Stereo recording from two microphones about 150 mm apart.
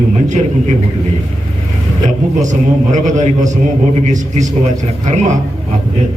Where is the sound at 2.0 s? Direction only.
55° right (ahead or behind).